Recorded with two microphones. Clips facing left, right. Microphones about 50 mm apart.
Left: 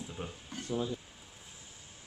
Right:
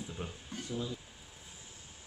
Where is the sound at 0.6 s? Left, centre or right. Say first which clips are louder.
Left 4 dB; left.